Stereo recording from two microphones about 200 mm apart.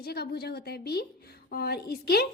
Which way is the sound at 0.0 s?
50° left (ahead or behind).